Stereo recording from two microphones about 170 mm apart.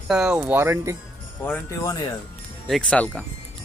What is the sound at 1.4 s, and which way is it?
Speech, 15° left (ahead or behind).